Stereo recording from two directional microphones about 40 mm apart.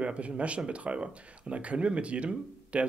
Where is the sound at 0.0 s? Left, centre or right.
Right.